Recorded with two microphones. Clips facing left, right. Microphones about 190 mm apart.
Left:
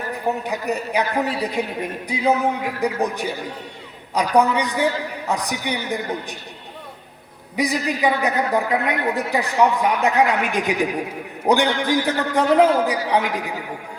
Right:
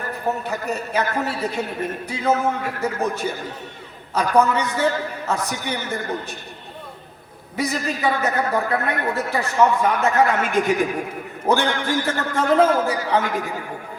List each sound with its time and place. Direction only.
0.1 s a man's voice: 15° left (ahead or behind)
7.5 s a man's voice: 15° left (ahead or behind)